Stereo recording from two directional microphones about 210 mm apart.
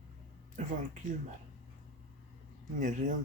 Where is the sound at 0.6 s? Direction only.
35° right (ahead or behind).